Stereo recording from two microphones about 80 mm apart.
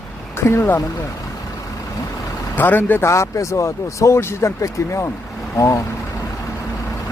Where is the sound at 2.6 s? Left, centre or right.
Left.